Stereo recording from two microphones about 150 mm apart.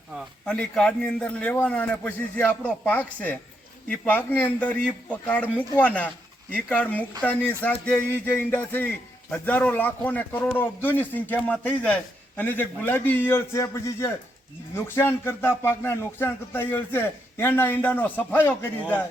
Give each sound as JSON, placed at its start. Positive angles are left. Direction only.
{"t": 0.4, "sound": "speech", "side_deg": 5}